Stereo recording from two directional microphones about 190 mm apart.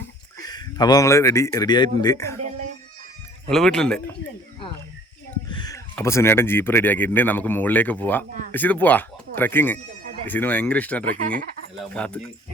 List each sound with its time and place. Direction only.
0.3 s speech: 20° left (ahead or behind)
3.5 s speech: centre (ahead or behind)
5.5 s speech: 20° left (ahead or behind)
11.1 s speech: 45° right (ahead or behind)
11.8 s speech: 5° left (ahead or behind)